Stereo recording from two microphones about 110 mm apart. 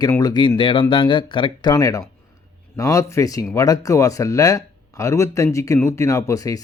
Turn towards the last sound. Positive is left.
turn(degrees=30)  # may be behind; listen again after turning